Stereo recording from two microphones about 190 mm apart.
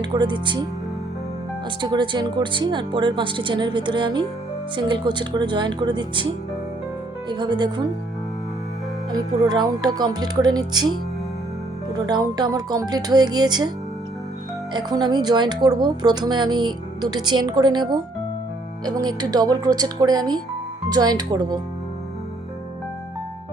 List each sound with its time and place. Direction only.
0.0 s speech: 25° right (ahead or behind)
1.8 s speech: 25° right (ahead or behind)
7.3 s speech: 25° right (ahead or behind)
9.1 s speech: 20° right (ahead or behind)
11.9 s speech: 20° right (ahead or behind)
14.7 s speech: 25° right (ahead or behind)